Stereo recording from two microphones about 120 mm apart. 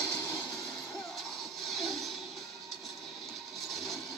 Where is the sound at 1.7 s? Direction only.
Centre (ahead or behind).